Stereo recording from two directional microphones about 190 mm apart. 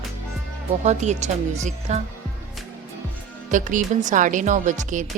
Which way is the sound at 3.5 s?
45° right (ahead or behind).